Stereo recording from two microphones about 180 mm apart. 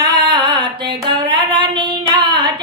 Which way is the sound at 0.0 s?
25° right (ahead or behind).